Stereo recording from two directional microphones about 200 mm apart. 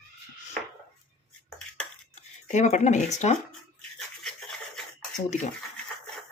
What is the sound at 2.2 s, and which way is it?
Speech, 35° left (ahead or behind).